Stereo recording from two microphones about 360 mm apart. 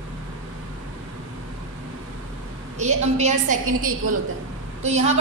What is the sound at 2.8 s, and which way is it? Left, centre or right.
A woman's voice, centre.